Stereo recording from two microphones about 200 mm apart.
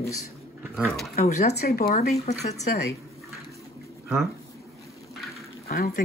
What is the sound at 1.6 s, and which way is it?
Speech, 50° left (ahead or behind).